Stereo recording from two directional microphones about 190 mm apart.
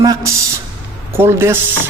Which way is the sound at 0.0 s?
20° right (ahead or behind).